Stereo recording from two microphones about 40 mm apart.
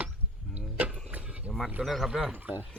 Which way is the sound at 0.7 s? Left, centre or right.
Right.